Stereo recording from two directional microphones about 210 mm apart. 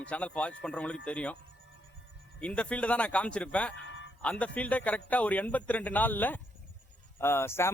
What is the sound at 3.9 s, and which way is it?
Music, 65° left (ahead or behind).